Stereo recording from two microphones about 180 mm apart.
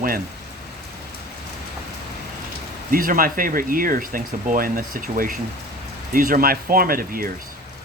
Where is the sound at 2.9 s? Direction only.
50° right (ahead or behind).